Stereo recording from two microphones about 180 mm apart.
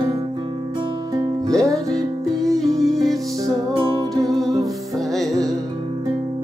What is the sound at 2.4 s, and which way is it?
Music, centre (ahead or behind).